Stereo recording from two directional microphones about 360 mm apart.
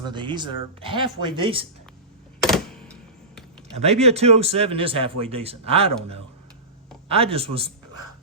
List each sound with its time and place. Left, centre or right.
0.0 s speech: centre
2.4 s a sound: centre
3.8 s speech: centre
7.1 s speech: centre